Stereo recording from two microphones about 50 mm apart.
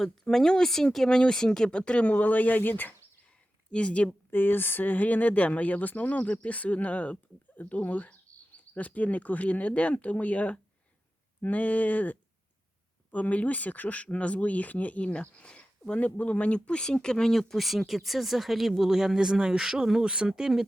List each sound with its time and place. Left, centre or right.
0.0 s speech: centre
2.1 s speech: left
3.7 s speech: left
4.3 s speech: left; by 20.5 s centre